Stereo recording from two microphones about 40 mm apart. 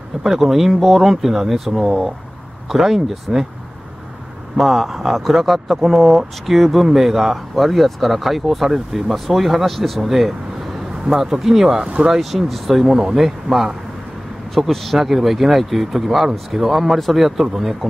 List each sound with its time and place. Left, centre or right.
0.2 s speech: centre
4.6 s speech: centre
11.8 s speech: right
12.2 s speech: centre